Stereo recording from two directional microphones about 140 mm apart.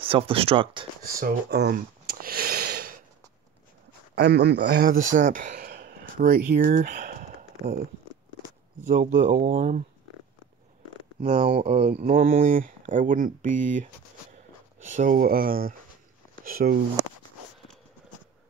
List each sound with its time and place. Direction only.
0.0 s speech: 40° right (ahead or behind)
1.0 s sniff: 90° right
4.7 s speech: 90° right; by 7.8 s 65° right (ahead or behind)
8.8 s speech: 70° right (ahead or behind)
11.2 s speech: 40° right (ahead or behind)
11.6 s speech: 55° right (ahead or behind)
12.0 s speech: 70° right (ahead or behind)
14.9 s speech: 65° right (ahead or behind); by 16.8 s 90° right